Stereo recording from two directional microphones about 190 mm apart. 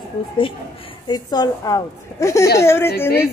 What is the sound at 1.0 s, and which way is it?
A woman's voice, 20° left (ahead or behind).